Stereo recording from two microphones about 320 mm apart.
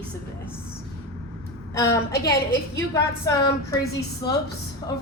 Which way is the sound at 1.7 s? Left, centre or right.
Centre.